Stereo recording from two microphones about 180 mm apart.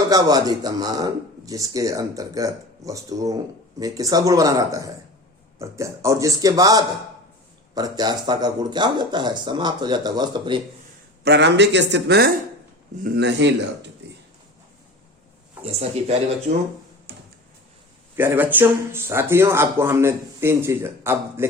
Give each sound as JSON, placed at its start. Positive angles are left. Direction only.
{"t": 0.1, "sound": "a man's voice", "side_deg": -20}
{"t": 11.2, "sound": "speech", "side_deg": -70}
{"t": 15.6, "sound": "speech", "side_deg": -35}
{"t": 18.2, "sound": "speech", "side_deg": -10}